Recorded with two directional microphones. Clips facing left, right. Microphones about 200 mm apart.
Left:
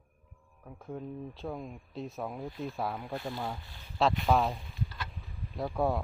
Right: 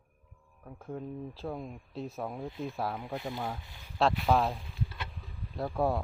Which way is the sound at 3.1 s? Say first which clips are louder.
Even; 20° right (ahead or behind).